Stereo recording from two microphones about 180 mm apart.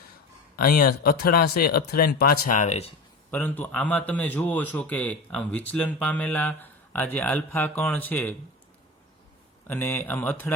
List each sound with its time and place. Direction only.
0.5 s speech: 55° left (ahead or behind)
3.3 s speech: 10° left (ahead or behind)
9.6 s speech: 10° left (ahead or behind)